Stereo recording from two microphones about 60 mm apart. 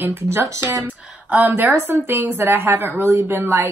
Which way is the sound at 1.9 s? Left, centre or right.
Right.